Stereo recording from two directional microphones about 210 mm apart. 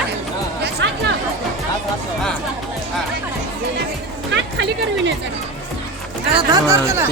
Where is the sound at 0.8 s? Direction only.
60° right (ahead or behind).